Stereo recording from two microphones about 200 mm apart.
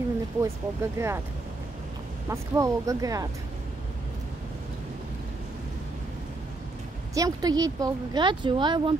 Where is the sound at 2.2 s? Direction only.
15° right (ahead or behind).